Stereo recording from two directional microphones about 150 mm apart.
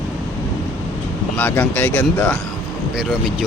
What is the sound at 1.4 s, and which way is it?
Speech, 10° left (ahead or behind).